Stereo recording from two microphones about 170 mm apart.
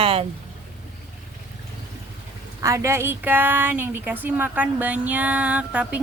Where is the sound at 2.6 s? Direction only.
20° right (ahead or behind).